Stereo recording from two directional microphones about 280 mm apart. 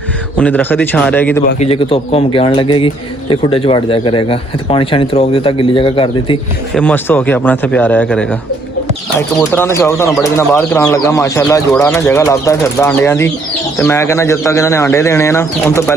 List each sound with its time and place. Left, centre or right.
0.3 s speech: centre
1.5 s speech: left
6.7 s a man's voice: centre
9.4 s speech: centre